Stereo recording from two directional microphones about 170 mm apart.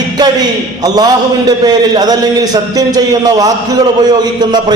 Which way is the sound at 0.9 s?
25° right (ahead or behind).